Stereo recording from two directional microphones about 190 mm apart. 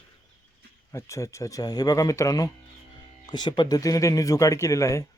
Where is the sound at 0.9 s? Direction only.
15° left (ahead or behind).